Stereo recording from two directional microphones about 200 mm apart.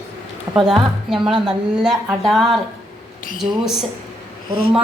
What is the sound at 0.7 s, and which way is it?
A woman's voice, centre (ahead or behind).